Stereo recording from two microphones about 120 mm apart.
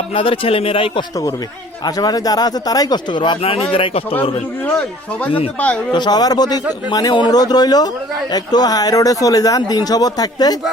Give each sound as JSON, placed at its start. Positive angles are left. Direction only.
{"t": 0.1, "sound": "speech", "side_deg": 50}
{"t": 1.8, "sound": "speech", "side_deg": 35}
{"t": 4.1, "sound": "speech", "side_deg": 15}
{"t": 5.9, "sound": "speech", "side_deg": 35}